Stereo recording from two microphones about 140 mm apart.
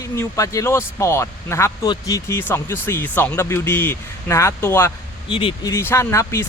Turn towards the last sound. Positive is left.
turn(degrees=20)  # may be behind; listen again after turning